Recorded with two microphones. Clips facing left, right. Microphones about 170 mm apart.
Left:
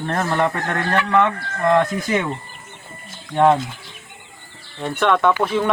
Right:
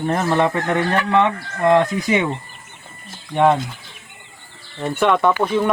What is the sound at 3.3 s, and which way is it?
Speech, 5° right (ahead or behind).